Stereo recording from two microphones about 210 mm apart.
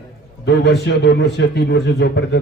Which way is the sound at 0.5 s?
55° left (ahead or behind).